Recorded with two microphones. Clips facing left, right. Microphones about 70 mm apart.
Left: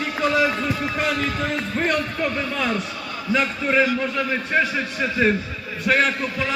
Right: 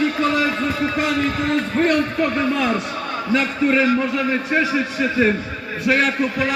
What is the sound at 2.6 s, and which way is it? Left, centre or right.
A man's voice, centre.